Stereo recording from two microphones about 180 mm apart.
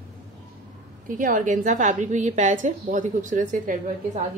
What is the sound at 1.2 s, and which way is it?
A woman's voice, 45° right (ahead or behind).